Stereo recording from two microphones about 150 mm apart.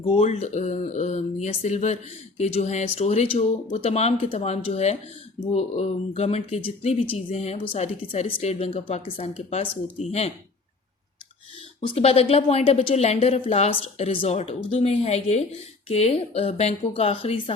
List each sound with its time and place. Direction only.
0.1 s a woman's voice: 45° left (ahead or behind)
11.9 s a woman's voice: 40° left (ahead or behind)